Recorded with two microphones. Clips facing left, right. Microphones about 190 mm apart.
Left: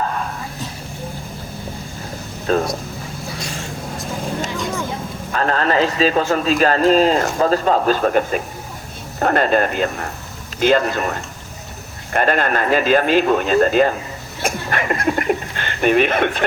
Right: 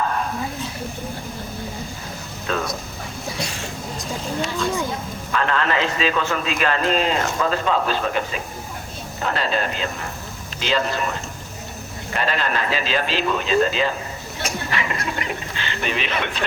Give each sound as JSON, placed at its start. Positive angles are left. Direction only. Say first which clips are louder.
{"t": 2.5, "sound": "a sound", "louder": "left 7 dB", "side_deg": 40}
{"t": 5.3, "sound": "a man's voice", "louder": "left 3 dB", "side_deg": 40}
{"t": 12.1, "sound": "speech", "louder": "left 6 dB", "side_deg": 50}